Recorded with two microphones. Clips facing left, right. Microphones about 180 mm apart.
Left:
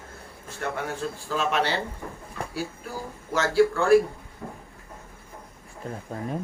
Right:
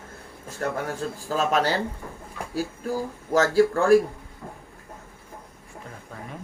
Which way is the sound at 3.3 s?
45° right (ahead or behind).